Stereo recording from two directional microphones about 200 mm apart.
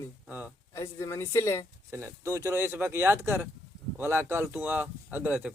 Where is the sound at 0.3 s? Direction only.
10° right (ahead or behind).